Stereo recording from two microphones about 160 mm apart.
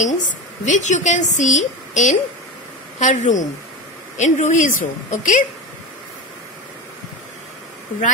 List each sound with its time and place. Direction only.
0.0 s speech: 50° left (ahead or behind)